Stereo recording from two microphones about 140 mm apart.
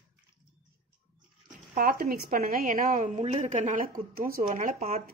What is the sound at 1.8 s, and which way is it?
Speech, 90° right.